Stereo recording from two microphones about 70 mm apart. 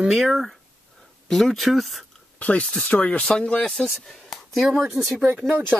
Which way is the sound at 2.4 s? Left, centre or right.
Centre.